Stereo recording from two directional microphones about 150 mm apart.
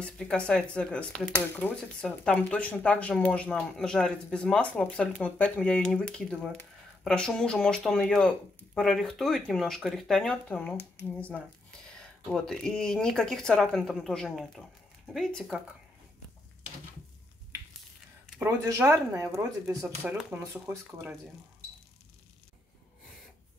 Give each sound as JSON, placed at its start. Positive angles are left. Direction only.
{"t": 0.0, "sound": "speech", "side_deg": 5}
{"t": 18.4, "sound": "speech", "side_deg": -15}